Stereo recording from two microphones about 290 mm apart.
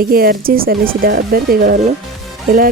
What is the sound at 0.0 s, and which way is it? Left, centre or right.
Speech, right.